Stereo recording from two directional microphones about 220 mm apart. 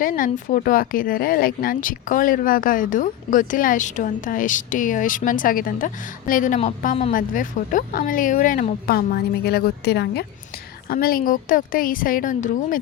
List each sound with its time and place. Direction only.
0.0 s speech: 40° left (ahead or behind)